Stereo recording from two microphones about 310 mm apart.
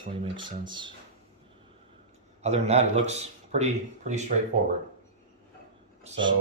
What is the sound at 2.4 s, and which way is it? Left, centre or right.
A man's voice, right.